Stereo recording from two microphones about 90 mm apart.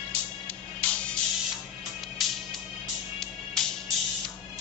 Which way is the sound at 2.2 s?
Centre (ahead or behind).